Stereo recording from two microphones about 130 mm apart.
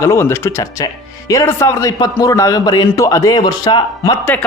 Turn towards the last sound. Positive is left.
turn(degrees=10)  # may be behind; listen again after turning